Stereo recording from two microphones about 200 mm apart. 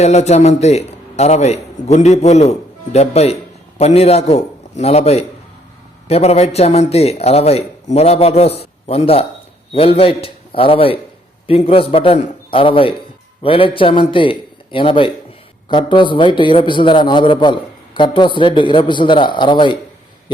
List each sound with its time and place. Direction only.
0.0 s a man's voice: 35° left (ahead or behind)